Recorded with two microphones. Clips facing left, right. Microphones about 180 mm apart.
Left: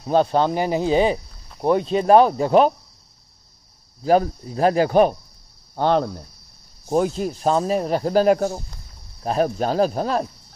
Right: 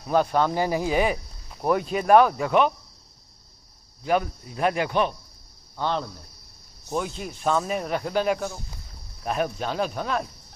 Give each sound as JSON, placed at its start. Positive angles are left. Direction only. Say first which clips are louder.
{"t": 0.0, "sound": "speech", "louder": "left 4 dB", "side_deg": 30}
{"t": 4.0, "sound": "speech", "louder": "left 6 dB", "side_deg": 35}
{"t": 5.8, "sound": "speech", "louder": "left 8 dB", "side_deg": 55}
{"t": 6.9, "sound": "speech", "louder": "left 9 dB", "side_deg": 40}